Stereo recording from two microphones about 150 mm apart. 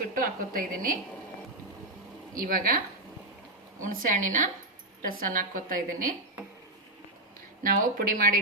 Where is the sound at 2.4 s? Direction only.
70° right (ahead or behind).